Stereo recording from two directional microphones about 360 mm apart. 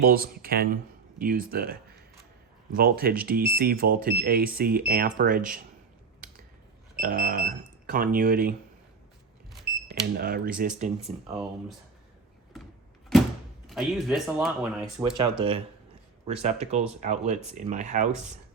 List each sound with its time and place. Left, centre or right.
0.0 s speech: right
7.0 s speech: right
9.9 s speech: right
12.5 s power windows: centre
13.7 s speech: centre
15.2 s speech: centre